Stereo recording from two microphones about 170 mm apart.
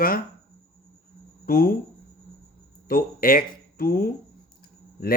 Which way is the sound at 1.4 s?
60° left (ahead or behind).